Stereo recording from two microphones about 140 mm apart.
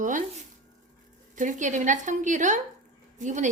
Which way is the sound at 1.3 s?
65° right (ahead or behind).